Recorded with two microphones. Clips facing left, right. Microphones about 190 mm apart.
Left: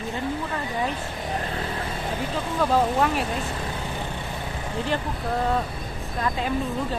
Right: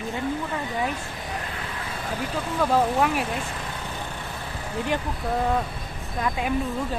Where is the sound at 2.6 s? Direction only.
5° right (ahead or behind).